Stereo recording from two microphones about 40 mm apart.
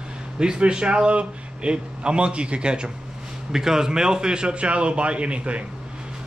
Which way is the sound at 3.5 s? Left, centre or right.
Centre.